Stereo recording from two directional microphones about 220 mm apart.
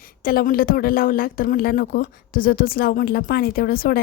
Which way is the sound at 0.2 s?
40° left (ahead or behind).